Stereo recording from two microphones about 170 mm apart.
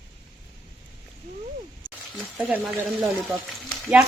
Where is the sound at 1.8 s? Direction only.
5° left (ahead or behind).